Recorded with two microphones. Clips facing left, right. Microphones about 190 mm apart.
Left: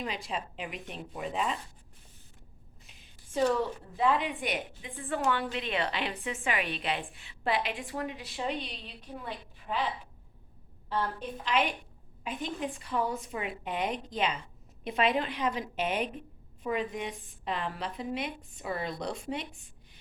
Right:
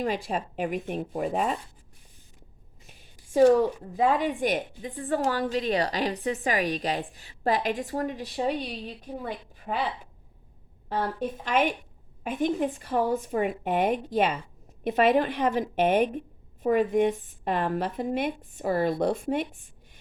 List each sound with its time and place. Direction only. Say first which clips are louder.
0.0 s a woman's voice: right 7 dB; 50° right (ahead or behind)
2.8 s a woman's voice: right 4 dB; 45° right (ahead or behind)
10.8 s a woman's voice: right 4 dB; 45° right (ahead or behind)